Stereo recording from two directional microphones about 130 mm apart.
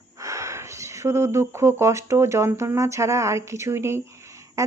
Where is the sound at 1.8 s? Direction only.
25° right (ahead or behind).